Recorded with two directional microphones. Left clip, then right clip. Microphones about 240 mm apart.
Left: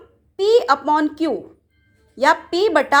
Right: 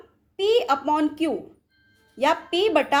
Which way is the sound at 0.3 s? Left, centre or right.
Centre.